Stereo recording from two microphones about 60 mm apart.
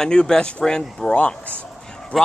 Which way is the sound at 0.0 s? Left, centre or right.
Centre.